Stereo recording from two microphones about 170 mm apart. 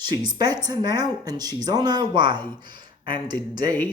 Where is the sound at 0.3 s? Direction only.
25° right (ahead or behind).